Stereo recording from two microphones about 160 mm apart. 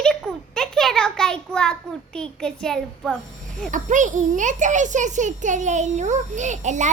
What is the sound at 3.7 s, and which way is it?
A child's voice, 50° right (ahead or behind).